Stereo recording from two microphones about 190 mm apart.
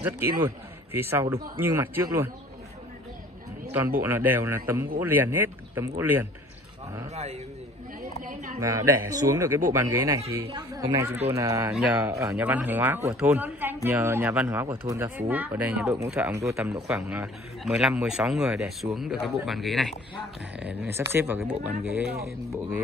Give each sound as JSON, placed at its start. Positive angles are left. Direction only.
{"t": 0.9, "sound": "speech", "side_deg": -10}
{"t": 3.7, "sound": "speech", "side_deg": -10}
{"t": 8.3, "sound": "speech", "side_deg": -40}
{"t": 8.5, "sound": "speech", "side_deg": -15}
{"t": 16.8, "sound": "a man's voice", "side_deg": -5}